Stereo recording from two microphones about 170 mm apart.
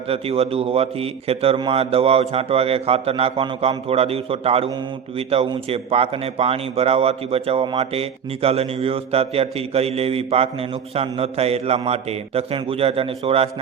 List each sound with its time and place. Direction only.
0.1 s a man's voice: 35° right (ahead or behind)